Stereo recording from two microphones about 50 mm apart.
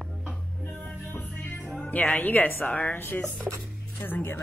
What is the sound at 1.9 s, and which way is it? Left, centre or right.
A woman's voice, left.